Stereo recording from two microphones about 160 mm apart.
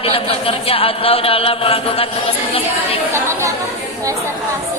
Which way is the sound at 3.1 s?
15° right (ahead or behind).